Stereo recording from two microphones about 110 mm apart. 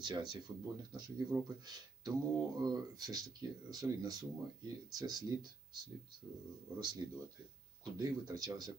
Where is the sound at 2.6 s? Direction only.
35° right (ahead or behind).